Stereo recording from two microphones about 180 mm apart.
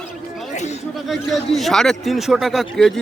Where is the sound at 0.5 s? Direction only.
40° left (ahead or behind).